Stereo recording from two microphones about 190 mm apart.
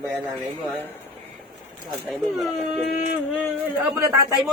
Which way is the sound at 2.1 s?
Centre (ahead or behind).